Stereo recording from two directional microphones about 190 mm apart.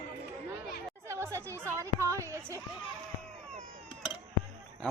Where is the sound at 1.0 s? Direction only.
15° right (ahead or behind).